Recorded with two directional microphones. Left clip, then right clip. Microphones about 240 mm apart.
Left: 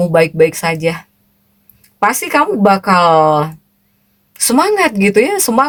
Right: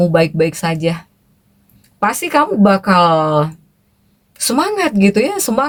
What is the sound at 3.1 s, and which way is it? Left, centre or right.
Speech, left.